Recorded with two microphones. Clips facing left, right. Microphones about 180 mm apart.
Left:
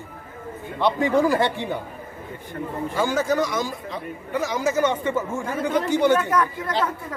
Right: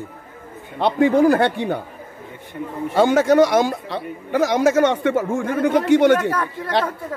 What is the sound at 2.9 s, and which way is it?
Speech, 75° right (ahead or behind).